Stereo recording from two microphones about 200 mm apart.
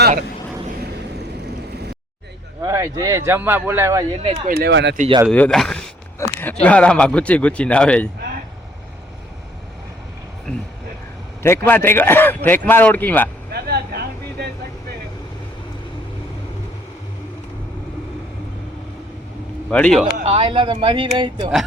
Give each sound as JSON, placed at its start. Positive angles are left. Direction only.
{"t": 2.6, "sound": "speech", "side_deg": -15}
{"t": 4.4, "sound": "speech", "side_deg": -50}
{"t": 4.9, "sound": "speech", "side_deg": -30}
{"t": 5.3, "sound": "speech", "side_deg": 5}
{"t": 11.4, "sound": "speech", "side_deg": 10}
{"t": 13.5, "sound": "vehicle", "side_deg": -55}
{"t": 19.7, "sound": "speech", "side_deg": 5}
{"t": 20.2, "sound": "speech", "side_deg": -25}